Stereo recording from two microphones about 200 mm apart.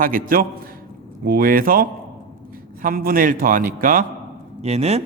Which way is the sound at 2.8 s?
45° right (ahead or behind).